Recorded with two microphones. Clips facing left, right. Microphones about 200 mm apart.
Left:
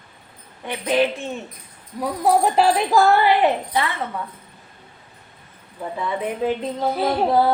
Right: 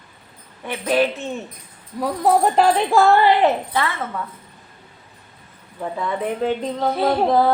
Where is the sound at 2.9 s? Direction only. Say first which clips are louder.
Right 1 dB; 5° left (ahead or behind).